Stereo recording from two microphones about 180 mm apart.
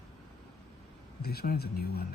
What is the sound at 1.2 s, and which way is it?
Speech, 60° left (ahead or behind).